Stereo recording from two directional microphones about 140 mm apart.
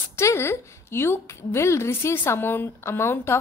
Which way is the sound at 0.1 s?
20° left (ahead or behind).